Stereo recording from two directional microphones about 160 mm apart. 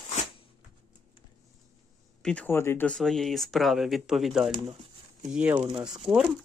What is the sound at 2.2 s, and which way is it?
Speech, 5° left (ahead or behind).